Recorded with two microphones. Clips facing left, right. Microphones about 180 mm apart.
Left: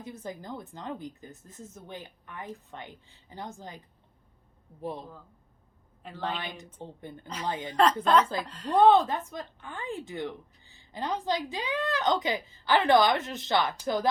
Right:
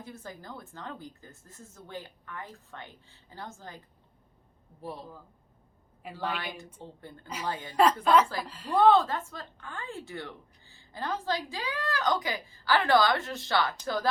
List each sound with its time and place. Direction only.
0.0 s speech: 20° left (ahead or behind)
4.8 s speech: 20° left (ahead or behind)
6.0 s a woman's voice: 10° right (ahead or behind)
6.8 s speech: 20° left (ahead or behind)
7.7 s speech: 10° right (ahead or behind)
8.8 s speech: 20° left (ahead or behind)